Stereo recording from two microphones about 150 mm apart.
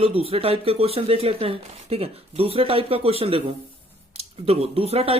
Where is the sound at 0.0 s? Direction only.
40° right (ahead or behind).